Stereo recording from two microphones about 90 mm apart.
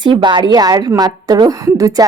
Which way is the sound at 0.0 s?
60° right (ahead or behind).